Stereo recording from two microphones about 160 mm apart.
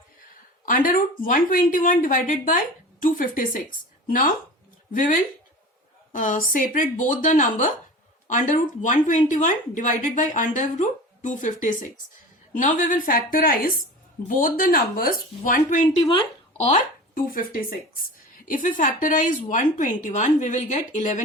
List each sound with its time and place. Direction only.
0.6 s speech: 60° left (ahead or behind)
4.9 s a woman's voice: 55° left (ahead or behind)
16.0 s speech: 30° left (ahead or behind)
17.2 s a woman's voice: 65° left (ahead or behind)